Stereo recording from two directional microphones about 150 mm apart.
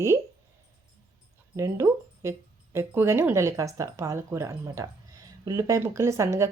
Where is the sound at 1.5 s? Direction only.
20° right (ahead or behind).